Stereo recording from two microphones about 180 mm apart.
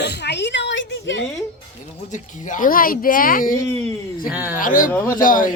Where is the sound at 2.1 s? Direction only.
45° left (ahead or behind).